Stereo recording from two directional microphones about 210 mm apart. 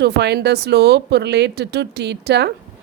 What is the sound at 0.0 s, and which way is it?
Speech, 50° right (ahead or behind).